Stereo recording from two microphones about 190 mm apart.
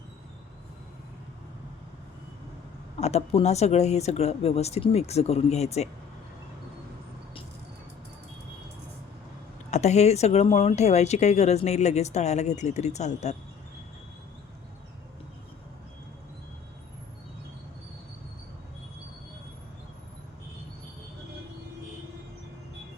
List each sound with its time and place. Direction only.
3.0 s speech: 35° left (ahead or behind)
9.6 s speech: 35° left (ahead or behind)